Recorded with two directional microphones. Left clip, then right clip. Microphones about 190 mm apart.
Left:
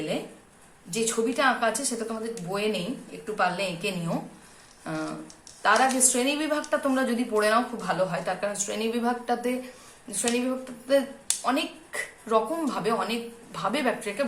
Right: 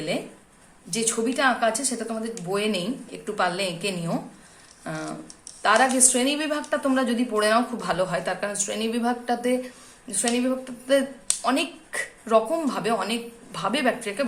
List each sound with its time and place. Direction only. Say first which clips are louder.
0.9 s a woman's voice: right 1 dB; 25° right (ahead or behind)
4.8 s a sound: even; 15° right (ahead or behind)
5.6 s a woman's voice: right 2 dB; 20° right (ahead or behind)
7.8 s a woman's voice: right 2 dB; 30° right (ahead or behind); by 14.3 s 15° right (ahead or behind)